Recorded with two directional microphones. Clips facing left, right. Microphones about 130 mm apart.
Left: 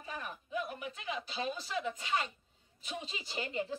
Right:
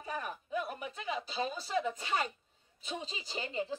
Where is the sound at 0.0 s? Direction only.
40° right (ahead or behind).